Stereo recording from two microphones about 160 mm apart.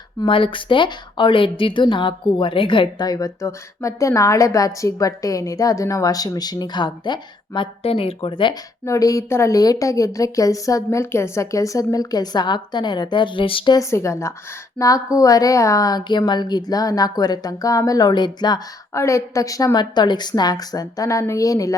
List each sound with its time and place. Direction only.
0.2 s a woman's voice: 35° left (ahead or behind)
8.8 s a woman's voice: 20° left (ahead or behind)
13.7 s a woman's voice: 20° left (ahead or behind)